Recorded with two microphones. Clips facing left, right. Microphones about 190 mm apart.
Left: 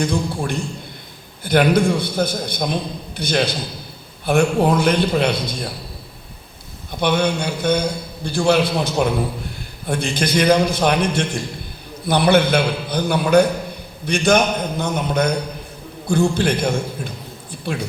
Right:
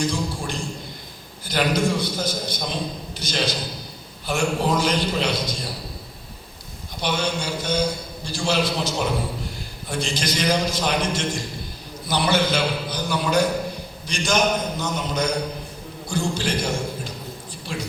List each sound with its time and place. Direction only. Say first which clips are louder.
0.0 s a sound: left 4 dB; 55° left (ahead or behind)
1.5 s a man's voice: left 6 dB; 60° left (ahead or behind)
7.0 s a man's voice: left 6 dB; 55° left (ahead or behind)